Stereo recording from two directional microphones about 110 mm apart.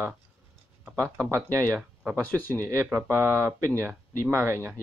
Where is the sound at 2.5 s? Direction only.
25° right (ahead or behind).